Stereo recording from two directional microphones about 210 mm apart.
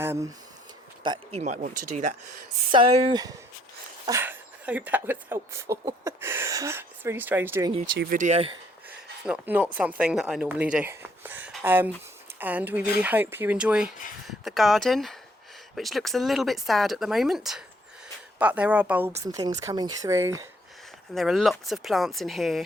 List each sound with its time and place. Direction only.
0.0 s speech: 10° right (ahead or behind)
1.0 s speech: 25° right (ahead or behind)
4.0 s speech: 10° right (ahead or behind)
7.9 s speech: 45° right (ahead or behind)
8.9 s a sound: 5° right (ahead or behind)
9.7 s speech: 5° right (ahead or behind)
21.2 s speech: centre (ahead or behind)